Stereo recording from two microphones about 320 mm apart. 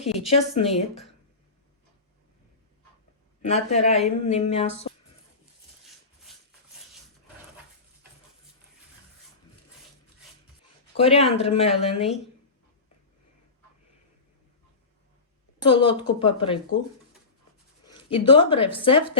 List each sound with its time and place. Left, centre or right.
0.3 s speech: centre
3.5 s speech: centre
6.3 s a sound: centre
10.9 s speech: centre
15.6 s speech: centre
17.8 s a sound: centre
18.3 s speech: centre